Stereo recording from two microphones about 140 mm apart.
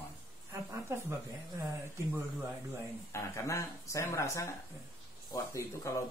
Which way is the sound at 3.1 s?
20° left (ahead or behind).